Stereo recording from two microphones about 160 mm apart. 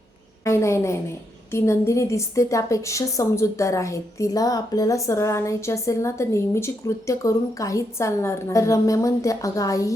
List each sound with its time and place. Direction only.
0.4 s a woman's voice: 20° left (ahead or behind)